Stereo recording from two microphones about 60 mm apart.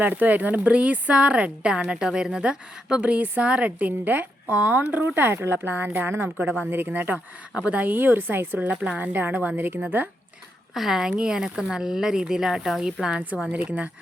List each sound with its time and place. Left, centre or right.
0.0 s a woman's voice: right
8.7 s speech: centre
9.0 s a woman's voice: right
10.8 s a woman's voice: centre; by 13.9 s right